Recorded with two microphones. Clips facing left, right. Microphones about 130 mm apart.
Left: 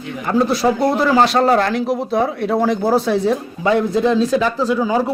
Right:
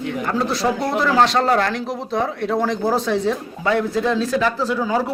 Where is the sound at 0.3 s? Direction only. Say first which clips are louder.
Left 6 dB; 10° left (ahead or behind).